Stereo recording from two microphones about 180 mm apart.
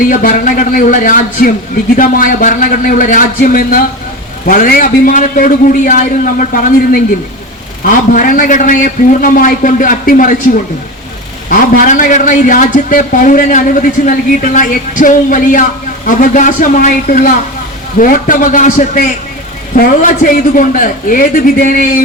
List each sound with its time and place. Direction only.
0.1 s a man's voice: 50° left (ahead or behind)
11.4 s a man's voice: 50° left (ahead or behind)